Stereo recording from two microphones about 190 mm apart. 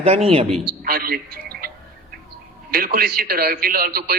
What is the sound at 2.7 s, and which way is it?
A man's voice, 50° right (ahead or behind).